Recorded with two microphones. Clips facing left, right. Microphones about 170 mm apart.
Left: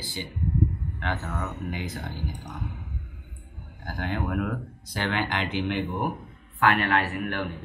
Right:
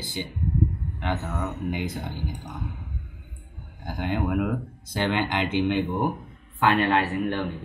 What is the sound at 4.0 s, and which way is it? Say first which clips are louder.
Speech: right 3 dB; 15° right (ahead or behind).